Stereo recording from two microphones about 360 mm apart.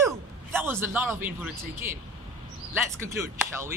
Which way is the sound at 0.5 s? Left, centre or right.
Centre.